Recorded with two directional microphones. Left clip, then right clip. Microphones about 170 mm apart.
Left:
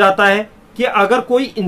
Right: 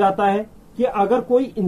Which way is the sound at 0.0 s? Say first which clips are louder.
Left 6 dB; 10° left (ahead or behind).